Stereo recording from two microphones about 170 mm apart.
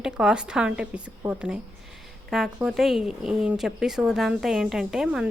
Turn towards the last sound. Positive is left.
turn(degrees=-5)  # may be behind; listen again after turning